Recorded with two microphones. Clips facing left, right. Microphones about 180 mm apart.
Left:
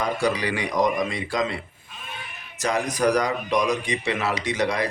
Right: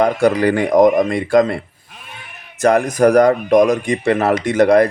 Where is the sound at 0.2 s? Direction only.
50° right (ahead or behind).